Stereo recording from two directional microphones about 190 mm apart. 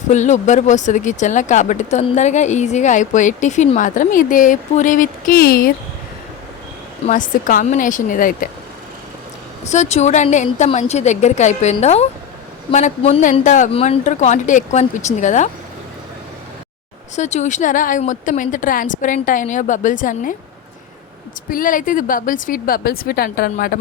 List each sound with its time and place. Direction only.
0.1 s speech: 40° left (ahead or behind)
7.1 s a woman's voice: 45° left (ahead or behind)
9.6 s speech: 35° left (ahead or behind)
17.2 s a woman's voice: 35° left (ahead or behind)
21.5 s a woman's voice: 45° left (ahead or behind)